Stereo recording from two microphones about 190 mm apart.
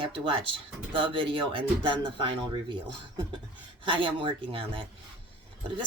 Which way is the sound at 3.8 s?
25° right (ahead or behind).